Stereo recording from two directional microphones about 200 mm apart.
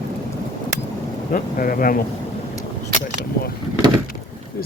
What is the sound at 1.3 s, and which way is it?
Speech, 45° left (ahead or behind).